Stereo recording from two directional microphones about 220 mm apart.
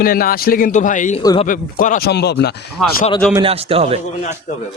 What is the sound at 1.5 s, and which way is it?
Speech, 35° left (ahead or behind).